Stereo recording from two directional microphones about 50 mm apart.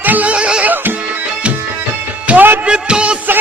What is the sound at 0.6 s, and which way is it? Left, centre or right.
Music, right.